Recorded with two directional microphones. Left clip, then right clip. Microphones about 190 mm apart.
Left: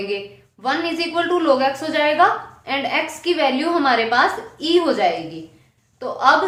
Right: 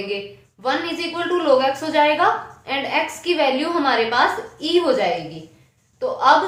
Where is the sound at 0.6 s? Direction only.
25° left (ahead or behind).